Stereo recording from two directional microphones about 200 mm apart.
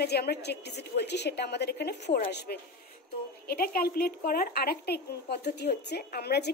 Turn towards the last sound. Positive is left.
turn(degrees=55)  # may be behind; listen again after turning